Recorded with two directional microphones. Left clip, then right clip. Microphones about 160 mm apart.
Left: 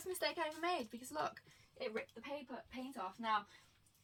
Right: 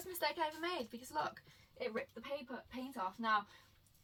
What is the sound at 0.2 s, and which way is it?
A woman's voice, 25° right (ahead or behind).